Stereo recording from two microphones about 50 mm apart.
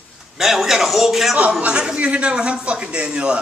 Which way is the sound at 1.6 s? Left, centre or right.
Right.